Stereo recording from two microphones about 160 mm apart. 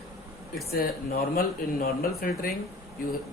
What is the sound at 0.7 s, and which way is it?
Speech, 70° left (ahead or behind).